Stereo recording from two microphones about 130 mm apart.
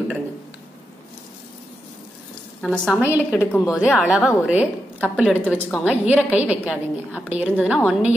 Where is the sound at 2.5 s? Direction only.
5° left (ahead or behind).